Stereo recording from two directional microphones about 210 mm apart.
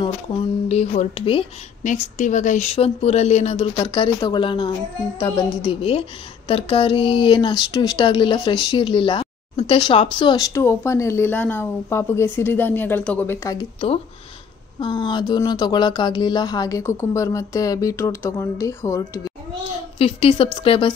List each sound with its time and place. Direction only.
0.0 s speech: 30° left (ahead or behind); by 19.3 s 15° left (ahead or behind)
20.0 s speech: 25° left (ahead or behind)